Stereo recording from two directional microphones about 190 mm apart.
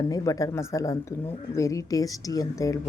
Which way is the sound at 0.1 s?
20° left (ahead or behind).